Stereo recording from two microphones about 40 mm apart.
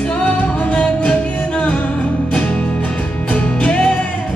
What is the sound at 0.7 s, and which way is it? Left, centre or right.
Music, left.